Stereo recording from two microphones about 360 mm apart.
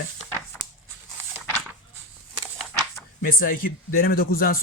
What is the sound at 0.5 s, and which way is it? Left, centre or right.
Biting, centre.